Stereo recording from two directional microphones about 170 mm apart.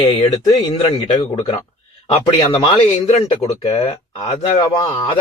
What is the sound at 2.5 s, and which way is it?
Speech, 30° left (ahead or behind).